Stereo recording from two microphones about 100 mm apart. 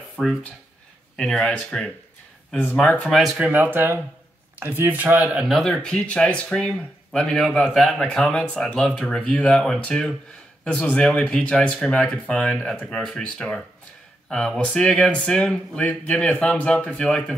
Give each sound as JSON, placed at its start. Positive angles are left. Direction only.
{"t": 0.1, "sound": "speech", "side_deg": 5}
{"t": 3.1, "sound": "speech", "side_deg": 0}
{"t": 3.5, "sound": "speech", "side_deg": -20}